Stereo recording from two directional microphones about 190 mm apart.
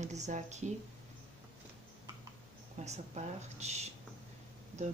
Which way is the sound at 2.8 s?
35° right (ahead or behind).